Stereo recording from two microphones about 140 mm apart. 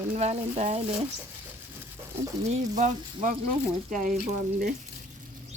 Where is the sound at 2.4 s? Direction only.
60° right (ahead or behind).